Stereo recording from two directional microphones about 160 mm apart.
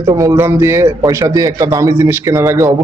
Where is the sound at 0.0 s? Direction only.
20° right (ahead or behind).